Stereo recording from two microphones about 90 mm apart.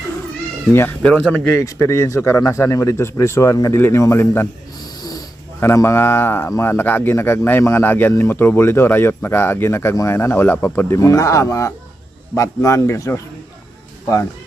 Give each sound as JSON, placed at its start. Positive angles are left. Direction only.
{"t": 0.7, "sound": "speech", "side_deg": 25}
{"t": 1.0, "sound": "speech", "side_deg": 15}
{"t": 1.5, "sound": "speech", "side_deg": 35}
{"t": 4.8, "sound": "snoring", "side_deg": 45}
{"t": 5.5, "sound": "speech", "side_deg": 30}